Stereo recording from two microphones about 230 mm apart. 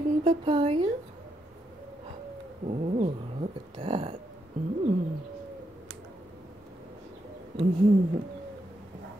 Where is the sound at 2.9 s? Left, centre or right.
Right.